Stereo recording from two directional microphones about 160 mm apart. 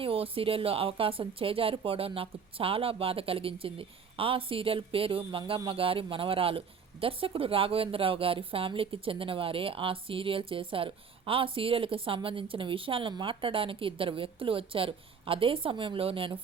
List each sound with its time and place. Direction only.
0.0 s a woman's voice: 35° right (ahead or behind)